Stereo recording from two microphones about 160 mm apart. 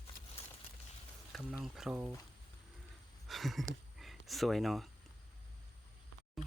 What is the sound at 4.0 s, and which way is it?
Speech, centre (ahead or behind).